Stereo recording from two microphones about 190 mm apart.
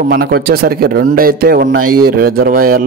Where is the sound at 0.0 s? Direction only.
50° right (ahead or behind).